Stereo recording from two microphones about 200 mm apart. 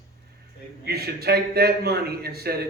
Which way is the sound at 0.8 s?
50° right (ahead or behind).